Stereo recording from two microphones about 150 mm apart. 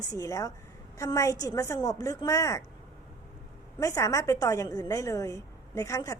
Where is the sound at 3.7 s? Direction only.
20° left (ahead or behind).